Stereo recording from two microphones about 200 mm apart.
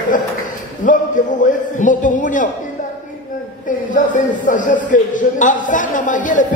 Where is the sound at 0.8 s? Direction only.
40° left (ahead or behind).